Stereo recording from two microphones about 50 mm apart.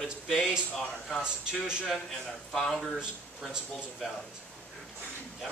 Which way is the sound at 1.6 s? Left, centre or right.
Centre.